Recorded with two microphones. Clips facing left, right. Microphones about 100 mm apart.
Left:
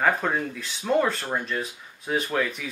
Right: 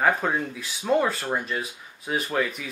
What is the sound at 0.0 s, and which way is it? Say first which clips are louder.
Speech: right 1 dB; 5° right (ahead or behind).